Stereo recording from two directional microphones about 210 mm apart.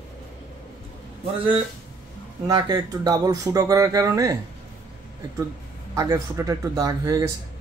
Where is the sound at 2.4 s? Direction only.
20° right (ahead or behind).